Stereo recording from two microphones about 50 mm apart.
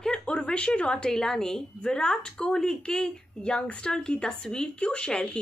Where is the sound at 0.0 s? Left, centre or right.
Centre.